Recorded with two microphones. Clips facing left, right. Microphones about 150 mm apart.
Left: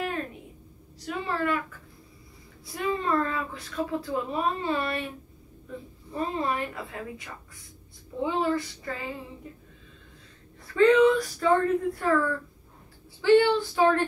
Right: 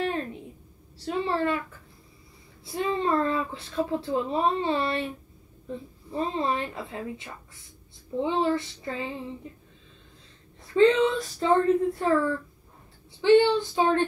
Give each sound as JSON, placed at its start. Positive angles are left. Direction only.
{"t": 0.9, "sound": "speech", "side_deg": -30}
{"t": 2.6, "sound": "speech", "side_deg": -25}
{"t": 10.7, "sound": "speech", "side_deg": -25}